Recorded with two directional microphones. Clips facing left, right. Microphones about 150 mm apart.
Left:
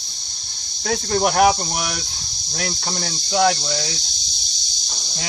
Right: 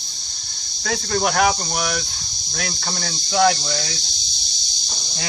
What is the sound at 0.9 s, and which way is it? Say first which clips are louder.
Speech: left 2 dB; 20° left (ahead or behind).